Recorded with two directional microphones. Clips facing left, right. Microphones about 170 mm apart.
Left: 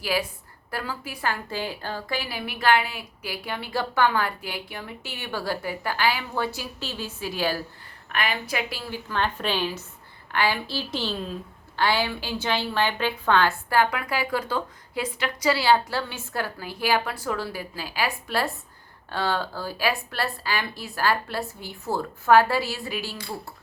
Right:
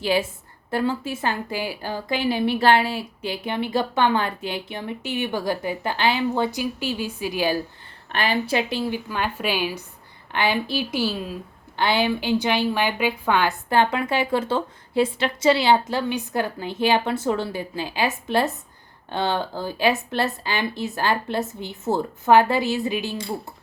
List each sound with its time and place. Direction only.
0.0 s a woman's voice: 25° right (ahead or behind)
8.1 s a woman's voice: 30° right (ahead or behind); by 11.3 s 5° right (ahead or behind)
11.8 s a woman's voice: 20° right (ahead or behind)